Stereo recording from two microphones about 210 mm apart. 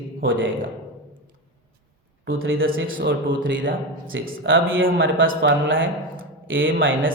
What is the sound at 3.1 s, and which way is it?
A man's voice, 60° right (ahead or behind).